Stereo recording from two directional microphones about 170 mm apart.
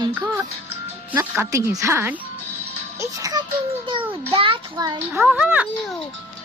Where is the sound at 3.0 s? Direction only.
20° right (ahead or behind).